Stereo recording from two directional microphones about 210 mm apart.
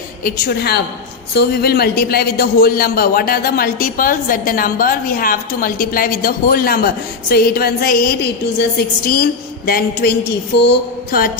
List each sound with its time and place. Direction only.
0.3 s a man's voice: 45° left (ahead or behind)
9.6 s a man's voice: 45° left (ahead or behind)